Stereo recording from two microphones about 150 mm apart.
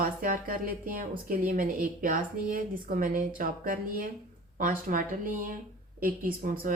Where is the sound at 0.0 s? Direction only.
70° right (ahead or behind).